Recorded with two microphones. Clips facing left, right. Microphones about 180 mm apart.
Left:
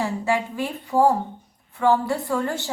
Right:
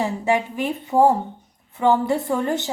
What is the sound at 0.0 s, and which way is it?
A woman's voice, 20° right (ahead or behind).